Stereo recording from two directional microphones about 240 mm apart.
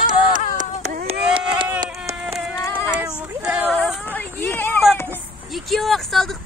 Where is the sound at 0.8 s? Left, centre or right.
Right.